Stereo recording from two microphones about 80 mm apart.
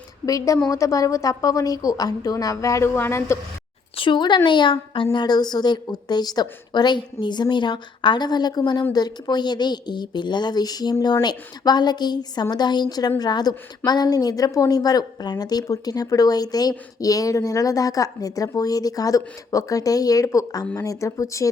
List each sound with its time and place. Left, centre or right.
0.3 s a woman's voice: left
4.0 s a woman's voice: left
5.1 s a woman's voice: left